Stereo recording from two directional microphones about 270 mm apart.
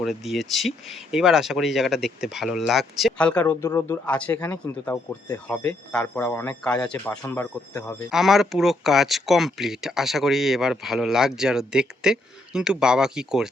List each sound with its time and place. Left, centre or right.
0.0 s speech: centre
8.1 s speech: centre